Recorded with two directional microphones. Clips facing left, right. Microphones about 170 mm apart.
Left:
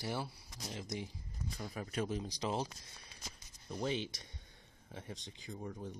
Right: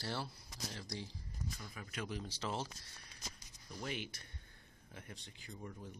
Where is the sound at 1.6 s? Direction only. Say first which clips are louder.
Left 12 dB; 35° left (ahead or behind).